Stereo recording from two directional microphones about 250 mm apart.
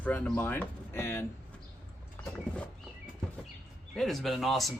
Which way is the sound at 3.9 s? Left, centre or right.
Centre.